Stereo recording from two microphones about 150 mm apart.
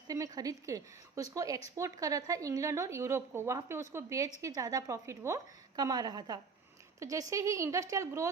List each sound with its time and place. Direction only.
0.1 s speech: 25° right (ahead or behind)